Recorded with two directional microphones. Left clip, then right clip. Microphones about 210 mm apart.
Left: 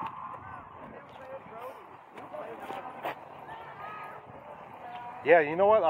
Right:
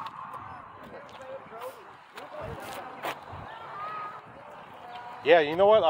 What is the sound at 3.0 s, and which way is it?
Vehicle, 15° right (ahead or behind).